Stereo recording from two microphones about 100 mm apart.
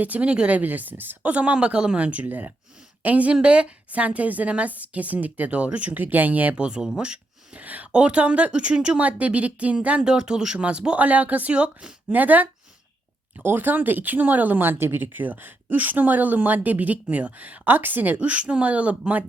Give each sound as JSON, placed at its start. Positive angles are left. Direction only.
{"t": 0.0, "sound": "a woman's voice", "side_deg": -15}